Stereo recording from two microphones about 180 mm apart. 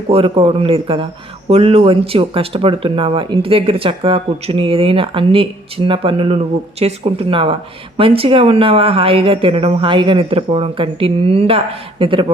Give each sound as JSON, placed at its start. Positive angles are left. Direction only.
{"t": 0.1, "sound": "speech", "side_deg": -30}